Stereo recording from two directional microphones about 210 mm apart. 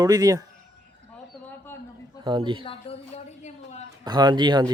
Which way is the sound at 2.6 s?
25° left (ahead or behind).